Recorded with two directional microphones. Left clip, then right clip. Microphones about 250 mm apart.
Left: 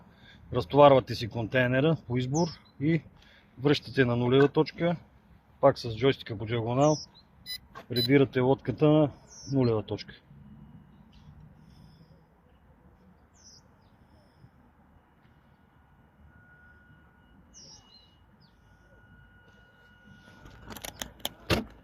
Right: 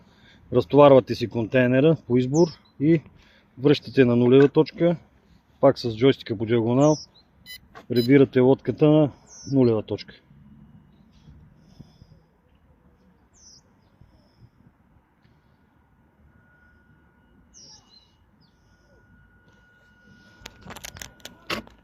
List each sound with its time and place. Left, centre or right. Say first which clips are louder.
0.2 s speech: right 9 dB; right